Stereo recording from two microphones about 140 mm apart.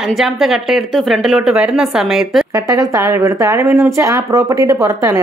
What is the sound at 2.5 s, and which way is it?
A woman's voice, 25° right (ahead or behind).